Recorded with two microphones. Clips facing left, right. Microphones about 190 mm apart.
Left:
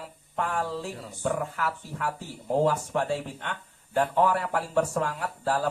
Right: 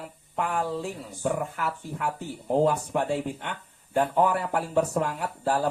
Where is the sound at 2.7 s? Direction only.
15° right (ahead or behind).